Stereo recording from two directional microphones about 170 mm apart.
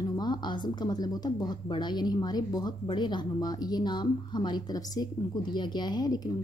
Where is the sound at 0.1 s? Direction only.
25° left (ahead or behind).